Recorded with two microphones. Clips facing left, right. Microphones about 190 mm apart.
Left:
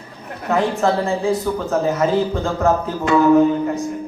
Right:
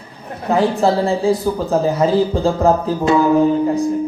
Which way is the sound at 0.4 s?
30° right (ahead or behind).